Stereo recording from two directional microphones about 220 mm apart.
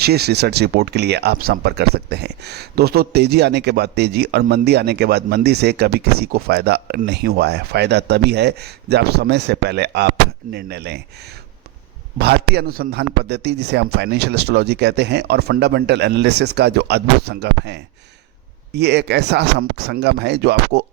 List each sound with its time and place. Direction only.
0.0 s speech: 45° right (ahead or behind)
12.2 s speech: 45° right (ahead or behind)